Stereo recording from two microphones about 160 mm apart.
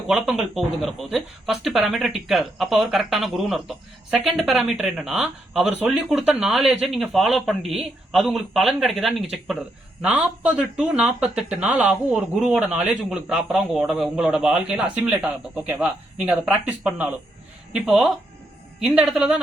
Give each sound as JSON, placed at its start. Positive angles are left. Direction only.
{"t": 0.1, "sound": "speech", "side_deg": -5}